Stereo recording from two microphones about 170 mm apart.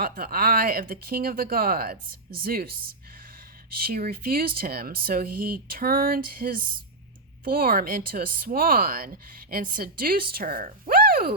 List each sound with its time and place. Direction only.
0.0 s speech: 60° right (ahead or behind)
3.8 s speech: 60° right (ahead or behind)